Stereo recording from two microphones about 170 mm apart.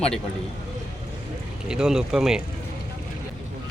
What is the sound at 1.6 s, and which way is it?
Speech, 5° right (ahead or behind).